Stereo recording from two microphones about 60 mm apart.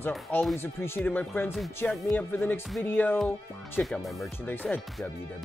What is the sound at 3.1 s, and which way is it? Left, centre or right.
Speech, centre.